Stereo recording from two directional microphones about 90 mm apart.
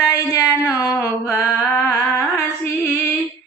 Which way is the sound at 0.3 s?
35° left (ahead or behind).